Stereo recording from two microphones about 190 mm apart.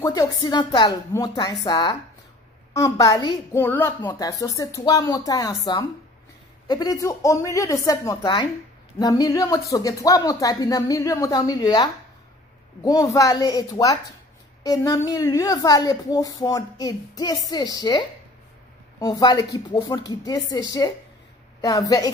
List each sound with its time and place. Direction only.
0.0 s a woman's voice: 15° left (ahead or behind)
6.7 s a woman's voice: 20° left (ahead or behind)